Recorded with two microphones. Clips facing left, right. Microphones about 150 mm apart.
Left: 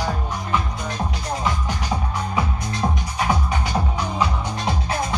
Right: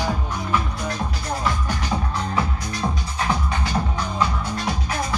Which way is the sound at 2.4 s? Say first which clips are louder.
Left 3 dB; 15° left (ahead or behind).